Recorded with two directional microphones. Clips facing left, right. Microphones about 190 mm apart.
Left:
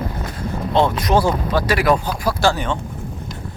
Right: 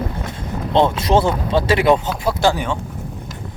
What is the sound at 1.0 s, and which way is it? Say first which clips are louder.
Speech: right 1 dB; 25° right (ahead or behind).